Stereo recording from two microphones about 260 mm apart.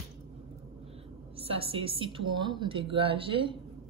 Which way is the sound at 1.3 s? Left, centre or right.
Right.